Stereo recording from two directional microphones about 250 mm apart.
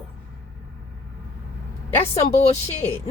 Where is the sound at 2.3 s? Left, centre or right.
Left.